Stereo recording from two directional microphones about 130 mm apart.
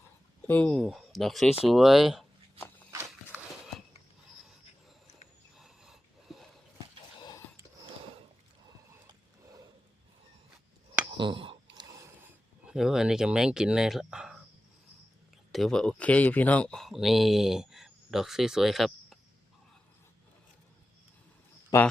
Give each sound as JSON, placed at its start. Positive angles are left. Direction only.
{"t": 0.4, "sound": "speech", "side_deg": 10}
{"t": 2.6, "sound": "walk", "side_deg": 20}
{"t": 5.5, "sound": "dog", "side_deg": -5}
{"t": 11.2, "sound": "a sound", "side_deg": -40}
{"t": 11.9, "sound": "a sound", "side_deg": -25}
{"t": 12.6, "sound": "speech", "side_deg": -5}
{"t": 15.5, "sound": "speech", "side_deg": 5}
{"t": 21.7, "sound": "speech", "side_deg": 25}